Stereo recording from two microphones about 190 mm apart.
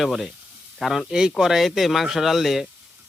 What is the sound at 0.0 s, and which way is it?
Speech, centre (ahead or behind).